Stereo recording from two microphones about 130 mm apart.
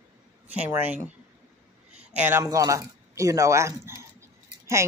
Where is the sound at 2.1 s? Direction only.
15° right (ahead or behind).